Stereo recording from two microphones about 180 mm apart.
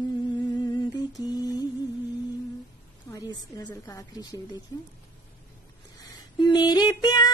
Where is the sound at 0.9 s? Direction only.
20° left (ahead or behind).